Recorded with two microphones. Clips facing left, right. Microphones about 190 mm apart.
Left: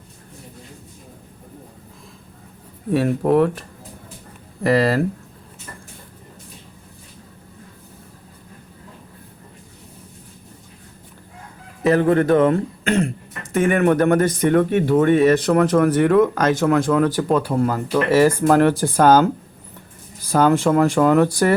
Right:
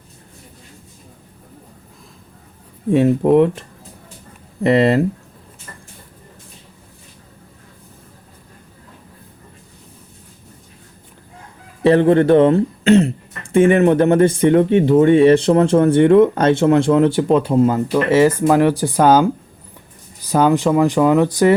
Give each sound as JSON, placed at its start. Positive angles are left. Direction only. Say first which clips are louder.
{"t": 3.3, "sound": "speech", "louder": "right 2 dB", "side_deg": -20}
{"t": 4.6, "sound": "speech", "louder": "right 3 dB", "side_deg": -25}
{"t": 11.8, "sound": "speech", "louder": "right 4 dB", "side_deg": -30}